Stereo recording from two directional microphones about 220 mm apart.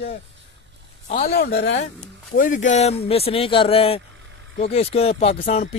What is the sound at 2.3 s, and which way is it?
Speech, 35° left (ahead or behind).